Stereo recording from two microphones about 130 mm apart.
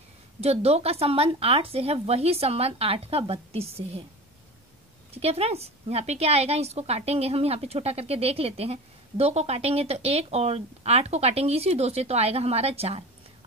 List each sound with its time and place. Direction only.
0.4 s a woman's voice: 50° right (ahead or behind)
5.1 s a woman's voice: 50° right (ahead or behind)